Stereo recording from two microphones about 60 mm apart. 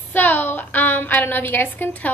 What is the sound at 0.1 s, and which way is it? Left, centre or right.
A woman's voice, left.